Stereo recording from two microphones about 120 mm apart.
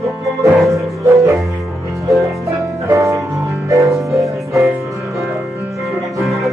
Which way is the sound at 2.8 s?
25° right (ahead or behind).